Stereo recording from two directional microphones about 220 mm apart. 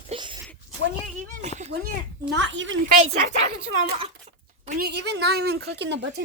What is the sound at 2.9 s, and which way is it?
Speech, 30° right (ahead or behind).